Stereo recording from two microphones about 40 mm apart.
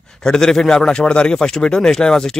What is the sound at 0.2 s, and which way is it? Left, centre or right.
A man's voice, centre.